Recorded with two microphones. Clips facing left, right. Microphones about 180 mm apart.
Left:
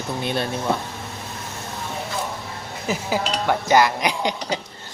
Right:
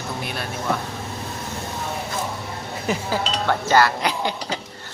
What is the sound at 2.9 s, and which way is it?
Speech, 15° left (ahead or behind).